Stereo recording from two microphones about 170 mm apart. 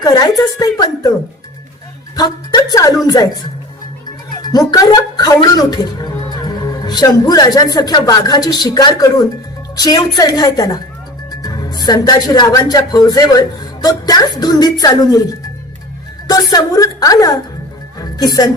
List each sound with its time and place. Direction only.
0.0 s a woman's voice: 25° left (ahead or behind)
2.1 s a woman's voice: 25° left (ahead or behind)
4.4 s a woman's voice: 20° left (ahead or behind)